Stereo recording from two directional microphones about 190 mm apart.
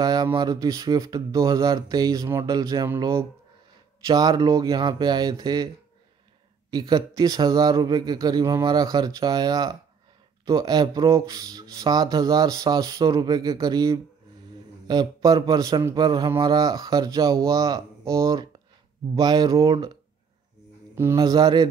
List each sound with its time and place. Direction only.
0.0 s speech: 20° right (ahead or behind)
6.7 s speech: 20° right (ahead or behind)
20.9 s speech: 15° right (ahead or behind)